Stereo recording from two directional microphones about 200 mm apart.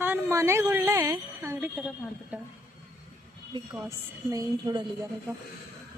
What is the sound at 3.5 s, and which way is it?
A woman's voice, 20° right (ahead or behind).